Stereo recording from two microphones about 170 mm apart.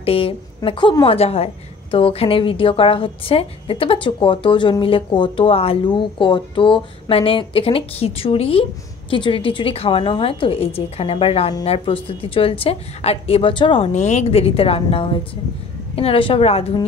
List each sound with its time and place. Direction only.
0.0 s a woman's voice: 35° left (ahead or behind)
13.9 s a woman's voice: 40° left (ahead or behind)